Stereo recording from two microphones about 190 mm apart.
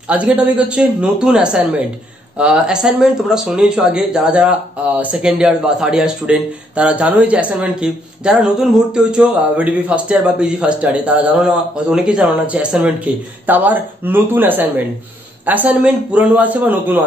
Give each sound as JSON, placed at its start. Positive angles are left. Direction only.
{"t": 0.1, "sound": "a man's voice", "side_deg": -5}